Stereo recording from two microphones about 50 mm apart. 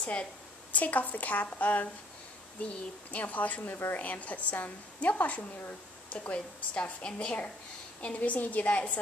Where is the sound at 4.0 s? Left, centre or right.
Left.